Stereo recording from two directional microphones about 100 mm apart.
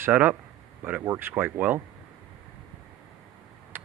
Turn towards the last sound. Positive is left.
turn(degrees=-20)  # may be behind; listen again after turning